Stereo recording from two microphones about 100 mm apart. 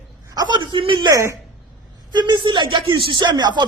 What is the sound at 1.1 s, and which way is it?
Speech, 30° right (ahead or behind).